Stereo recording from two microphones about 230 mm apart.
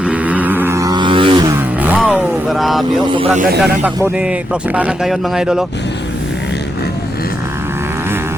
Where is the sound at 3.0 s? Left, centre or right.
Right.